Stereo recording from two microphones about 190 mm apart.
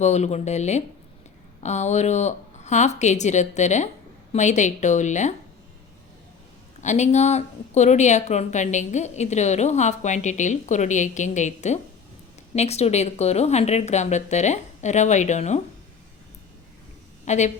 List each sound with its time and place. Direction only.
0.0 s speech: 35° left (ahead or behind)
6.8 s speech: 40° left (ahead or behind)
17.2 s a woman's voice: 40° left (ahead or behind)